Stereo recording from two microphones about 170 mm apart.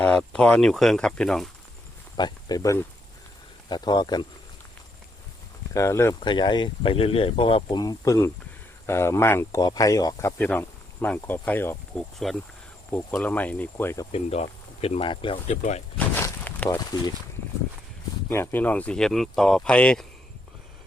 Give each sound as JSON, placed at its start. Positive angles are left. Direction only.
{"t": 0.0, "sound": "speech", "side_deg": 5}
{"t": 2.1, "sound": "speech", "side_deg": 25}
{"t": 5.7, "sound": "speech", "side_deg": 15}
{"t": 6.1, "sound": "speech", "side_deg": 30}
{"t": 14.1, "sound": "speech", "side_deg": 40}
{"t": 16.0, "sound": "a sound", "side_deg": 10}
{"t": 16.6, "sound": "speech", "side_deg": 20}
{"t": 18.3, "sound": "speech", "side_deg": 15}